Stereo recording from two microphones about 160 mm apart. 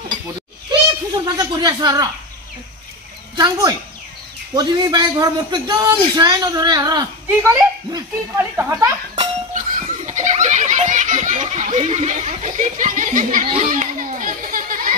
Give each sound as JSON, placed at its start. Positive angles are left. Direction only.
{"t": 0.7, "sound": "a sound", "side_deg": -25}
{"t": 3.3, "sound": "a man's voice", "side_deg": -25}
{"t": 7.4, "sound": "speech", "side_deg": -15}
{"t": 9.5, "sound": "baby laughter", "side_deg": -55}